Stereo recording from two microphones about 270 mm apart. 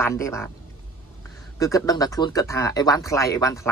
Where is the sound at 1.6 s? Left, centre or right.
Centre.